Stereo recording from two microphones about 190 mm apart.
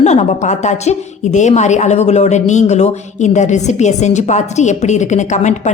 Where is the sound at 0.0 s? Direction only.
40° left (ahead or behind).